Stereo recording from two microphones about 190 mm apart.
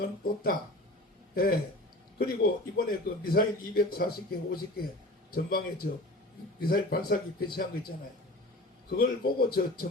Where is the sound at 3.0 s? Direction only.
50° left (ahead or behind).